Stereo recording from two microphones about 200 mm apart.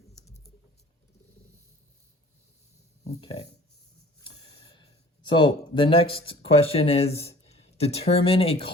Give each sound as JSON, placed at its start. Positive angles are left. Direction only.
{"t": 3.0, "sound": "speech", "side_deg": 30}
{"t": 5.3, "sound": "speech", "side_deg": 25}